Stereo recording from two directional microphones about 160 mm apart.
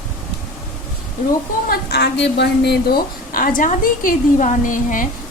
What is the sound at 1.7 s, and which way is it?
A woman's voice, 90° left.